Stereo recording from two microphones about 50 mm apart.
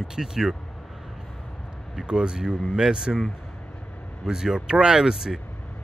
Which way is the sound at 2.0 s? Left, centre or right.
Centre.